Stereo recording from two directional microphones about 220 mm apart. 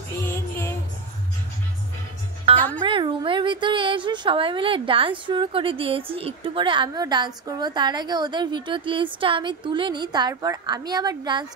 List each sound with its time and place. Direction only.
0.2 s music: 10° left (ahead or behind)
2.8 s a woman's voice: 20° right (ahead or behind)